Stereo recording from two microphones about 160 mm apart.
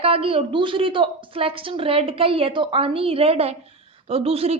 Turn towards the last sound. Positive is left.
turn(degrees=-40)  # may be behind; listen again after turning